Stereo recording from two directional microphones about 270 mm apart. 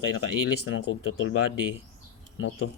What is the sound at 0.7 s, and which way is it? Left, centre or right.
Speech, left.